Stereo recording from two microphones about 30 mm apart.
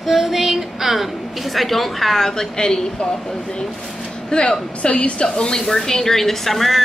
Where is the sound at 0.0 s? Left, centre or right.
Centre.